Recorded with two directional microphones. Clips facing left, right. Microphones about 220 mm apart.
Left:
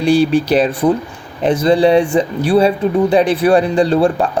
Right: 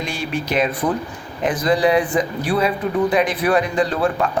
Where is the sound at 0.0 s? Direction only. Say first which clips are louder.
Left 13 dB; 35° left (ahead or behind).